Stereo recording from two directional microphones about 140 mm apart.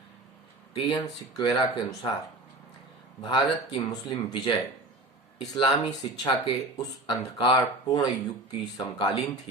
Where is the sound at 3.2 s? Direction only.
30° left (ahead or behind).